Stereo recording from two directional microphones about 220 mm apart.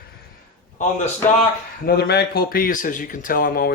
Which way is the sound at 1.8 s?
45° left (ahead or behind).